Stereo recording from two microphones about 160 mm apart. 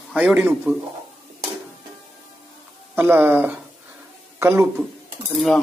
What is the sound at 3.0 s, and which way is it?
A man's voice, 15° right (ahead or behind).